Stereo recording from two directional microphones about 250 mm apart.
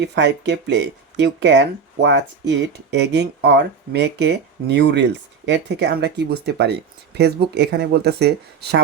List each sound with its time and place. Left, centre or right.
0.0 s speech: right